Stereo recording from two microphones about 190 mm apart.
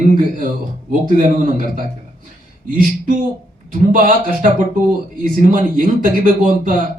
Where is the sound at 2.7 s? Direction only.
45° right (ahead or behind).